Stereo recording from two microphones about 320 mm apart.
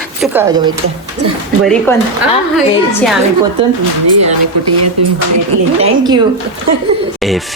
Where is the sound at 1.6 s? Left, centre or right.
Centre.